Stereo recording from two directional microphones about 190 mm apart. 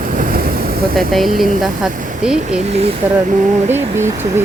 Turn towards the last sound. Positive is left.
turn(degrees=-10)  # may be behind; listen again after turning